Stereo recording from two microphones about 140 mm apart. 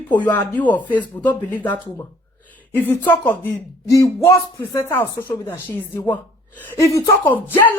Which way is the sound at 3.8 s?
25° left (ahead or behind).